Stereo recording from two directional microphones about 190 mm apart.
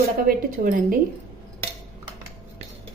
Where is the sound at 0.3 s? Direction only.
45° right (ahead or behind).